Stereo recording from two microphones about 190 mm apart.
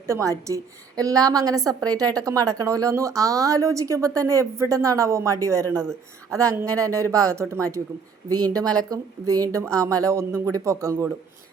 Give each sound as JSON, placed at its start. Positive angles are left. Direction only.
{"t": 0.1, "sound": "a woman's voice", "side_deg": -15}